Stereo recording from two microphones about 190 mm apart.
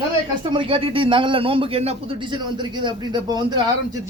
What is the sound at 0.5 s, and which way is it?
A man's voice, 25° right (ahead or behind).